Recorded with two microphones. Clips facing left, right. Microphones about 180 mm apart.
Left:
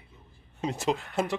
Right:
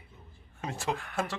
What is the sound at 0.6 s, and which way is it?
Speech, 20° left (ahead or behind).